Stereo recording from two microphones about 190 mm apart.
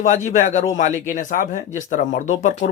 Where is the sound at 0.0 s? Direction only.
40° left (ahead or behind).